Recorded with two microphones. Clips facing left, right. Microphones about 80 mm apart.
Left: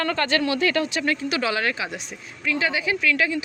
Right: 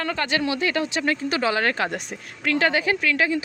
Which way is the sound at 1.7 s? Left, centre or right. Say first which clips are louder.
Right 5 dB; right.